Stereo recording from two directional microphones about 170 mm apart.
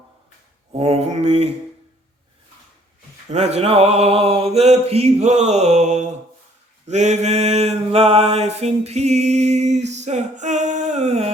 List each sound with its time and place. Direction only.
0.7 s mantra: 40° right (ahead or behind)
3.2 s mantra: 40° right (ahead or behind)
9.9 s a sound: 40° right (ahead or behind)